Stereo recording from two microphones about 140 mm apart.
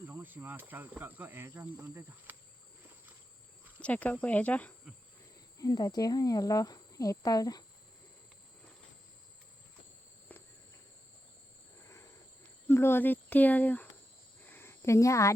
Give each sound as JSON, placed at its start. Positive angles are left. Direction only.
{"t": 0.0, "sound": "insect", "side_deg": -15}
{"t": 3.8, "sound": "speech", "side_deg": 10}
{"t": 5.5, "sound": "speech", "side_deg": 25}
{"t": 12.6, "sound": "speech", "side_deg": 15}
{"t": 14.4, "sound": "cricket", "side_deg": 15}